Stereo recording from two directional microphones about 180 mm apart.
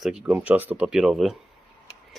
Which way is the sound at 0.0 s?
5° right (ahead or behind).